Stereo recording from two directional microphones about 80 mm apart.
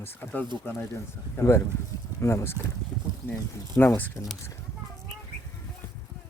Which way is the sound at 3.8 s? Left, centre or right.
Left.